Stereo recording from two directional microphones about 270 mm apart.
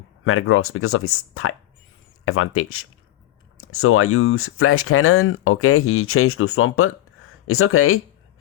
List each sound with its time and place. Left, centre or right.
0.3 s speech: left